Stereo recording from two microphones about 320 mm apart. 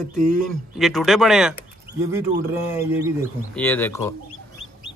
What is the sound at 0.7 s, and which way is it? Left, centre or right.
Speech, centre.